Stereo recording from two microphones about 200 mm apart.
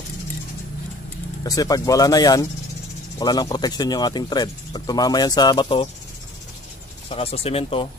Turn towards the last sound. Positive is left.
turn(degrees=25)  # may be behind; listen again after turning